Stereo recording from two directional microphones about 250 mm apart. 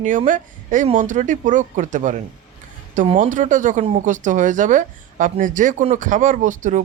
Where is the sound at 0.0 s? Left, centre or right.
Right.